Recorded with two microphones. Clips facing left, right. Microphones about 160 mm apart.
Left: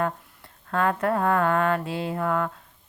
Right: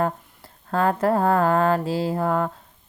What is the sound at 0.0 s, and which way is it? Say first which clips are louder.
Speech: right 3 dB; 30° right (ahead or behind).